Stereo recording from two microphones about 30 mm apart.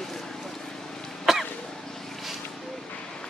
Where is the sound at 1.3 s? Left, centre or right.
Centre.